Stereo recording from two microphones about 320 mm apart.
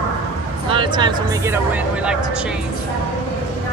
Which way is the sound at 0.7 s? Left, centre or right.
Centre.